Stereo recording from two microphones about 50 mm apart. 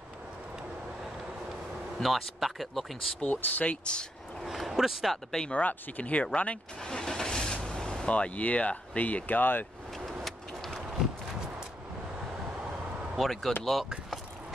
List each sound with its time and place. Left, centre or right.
2.0 s speech: centre
3.2 s speech: left
4.5 s speech: centre
5.1 s speech: centre
5.5 s speech: left
6.8 s vehicle: centre
8.1 s speech: left
10.2 s vehicle: centre
13.2 s speech: centre